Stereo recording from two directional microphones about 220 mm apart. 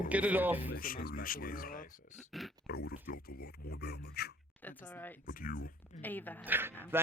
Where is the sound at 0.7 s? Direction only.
40° left (ahead or behind).